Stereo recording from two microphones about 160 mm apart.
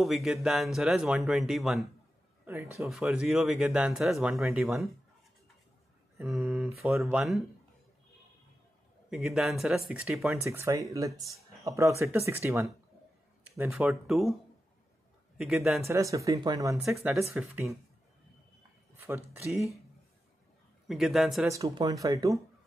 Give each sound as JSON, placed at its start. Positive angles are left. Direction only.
{"t": 0.0, "sound": "speech", "side_deg": 0}
{"t": 2.4, "sound": "speech", "side_deg": -20}
{"t": 2.8, "sound": "speech", "side_deg": -5}
{"t": 6.2, "sound": "speech", "side_deg": 0}
{"t": 9.1, "sound": "speech", "side_deg": 0}
{"t": 10.5, "sound": "speech", "side_deg": -15}
{"t": 13.7, "sound": "speech", "side_deg": -5}
{"t": 15.3, "sound": "speech", "side_deg": 0}
{"t": 15.9, "sound": "speech", "side_deg": -20}
{"t": 18.9, "sound": "a sound", "side_deg": -15}
{"t": 20.9, "sound": "speech", "side_deg": 0}
{"t": 21.5, "sound": "speech", "side_deg": -20}